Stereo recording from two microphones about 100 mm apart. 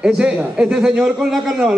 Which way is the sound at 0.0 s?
5° right (ahead or behind).